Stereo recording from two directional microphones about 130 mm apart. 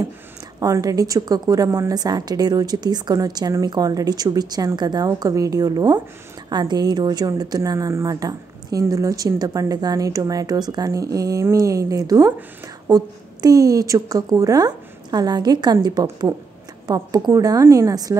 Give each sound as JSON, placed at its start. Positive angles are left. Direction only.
{"t": 0.6, "sound": "a woman's voice", "side_deg": -25}